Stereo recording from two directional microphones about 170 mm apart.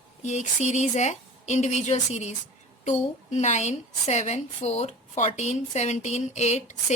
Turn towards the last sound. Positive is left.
turn(degrees=40)  # may be behind; listen again after turning